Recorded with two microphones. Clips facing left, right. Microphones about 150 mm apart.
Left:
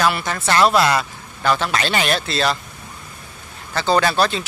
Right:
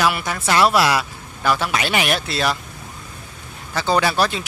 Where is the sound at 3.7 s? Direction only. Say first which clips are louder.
Left 1 dB; 10° right (ahead or behind).